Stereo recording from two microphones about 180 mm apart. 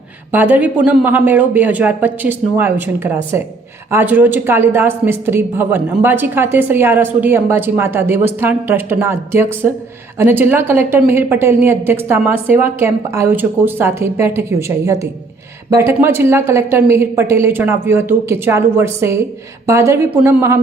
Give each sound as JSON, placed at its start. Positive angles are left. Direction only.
{"t": 0.3, "sound": "speech", "side_deg": -10}
{"t": 15.7, "sound": "speech", "side_deg": -15}